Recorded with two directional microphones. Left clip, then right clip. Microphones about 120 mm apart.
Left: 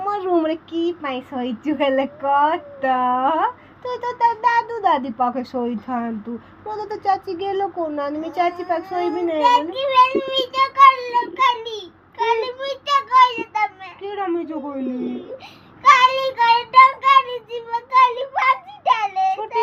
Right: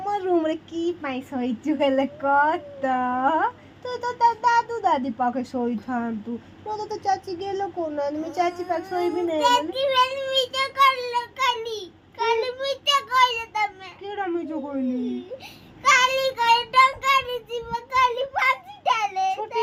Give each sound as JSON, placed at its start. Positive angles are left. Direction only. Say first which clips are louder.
{"t": 0.0, "sound": "speech", "louder": "left 3 dB", "side_deg": 15}
{"t": 6.7, "sound": "speech", "louder": "left 4 dB", "side_deg": 10}
{"t": 15.8, "sound": "child singing", "louder": "left 5 dB", "side_deg": 15}